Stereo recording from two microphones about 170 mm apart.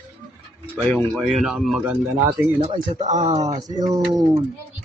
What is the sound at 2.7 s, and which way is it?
Speech, 45° right (ahead or behind).